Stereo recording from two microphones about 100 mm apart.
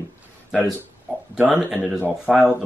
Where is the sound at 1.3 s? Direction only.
10° right (ahead or behind).